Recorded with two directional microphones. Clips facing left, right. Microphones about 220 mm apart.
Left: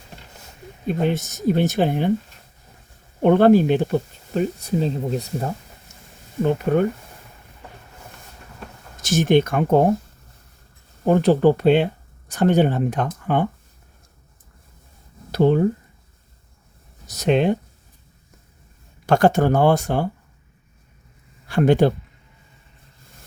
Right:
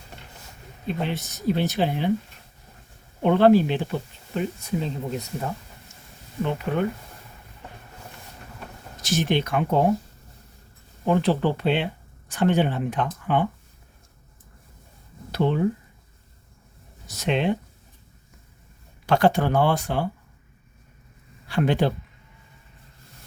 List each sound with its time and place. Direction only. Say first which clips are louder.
0.9 s speech: left 6 dB; 45° left (ahead or behind)
3.2 s speech: left 3 dB; 50° left (ahead or behind)
6.7 s speech: left 7 dB; 40° left (ahead or behind)
9.0 s speech: left 7 dB; 45° left (ahead or behind)
11.0 s speech: left 6 dB; 45° left (ahead or behind)
15.3 s speech: left 6 dB; 40° left (ahead or behind)
17.1 s speech: left 5 dB; 40° left (ahead or behind)
19.0 s speech: left 4 dB; 45° left (ahead or behind)
21.4 s speech: left 6 dB; 45° left (ahead or behind)